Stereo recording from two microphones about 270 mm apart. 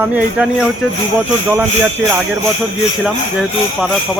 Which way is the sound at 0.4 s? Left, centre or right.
Centre.